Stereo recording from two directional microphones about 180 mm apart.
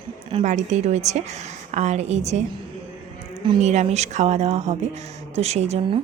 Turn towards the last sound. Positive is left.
turn(degrees=-35)  # may be behind; listen again after turning